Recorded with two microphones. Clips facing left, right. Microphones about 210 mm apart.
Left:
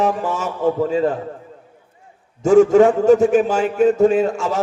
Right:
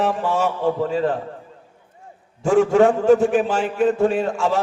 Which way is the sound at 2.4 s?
45° left (ahead or behind).